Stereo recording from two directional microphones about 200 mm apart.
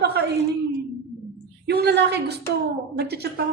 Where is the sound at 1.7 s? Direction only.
55° right (ahead or behind).